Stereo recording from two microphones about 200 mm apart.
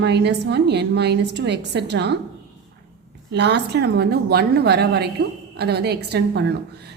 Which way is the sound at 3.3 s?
60° right (ahead or behind).